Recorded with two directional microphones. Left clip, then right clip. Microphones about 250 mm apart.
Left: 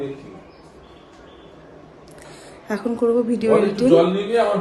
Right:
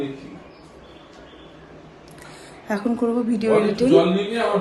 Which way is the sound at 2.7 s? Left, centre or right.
Centre.